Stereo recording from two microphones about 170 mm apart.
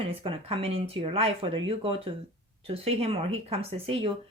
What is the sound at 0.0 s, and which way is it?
Speech, 35° right (ahead or behind).